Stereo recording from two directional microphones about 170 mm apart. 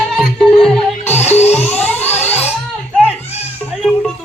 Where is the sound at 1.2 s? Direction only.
40° left (ahead or behind).